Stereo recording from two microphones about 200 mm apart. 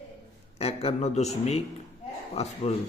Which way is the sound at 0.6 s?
30° left (ahead or behind).